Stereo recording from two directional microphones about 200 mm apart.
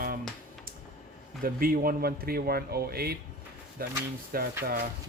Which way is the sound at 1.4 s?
45° right (ahead or behind).